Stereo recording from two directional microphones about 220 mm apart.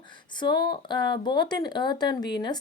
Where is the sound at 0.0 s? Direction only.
20° left (ahead or behind).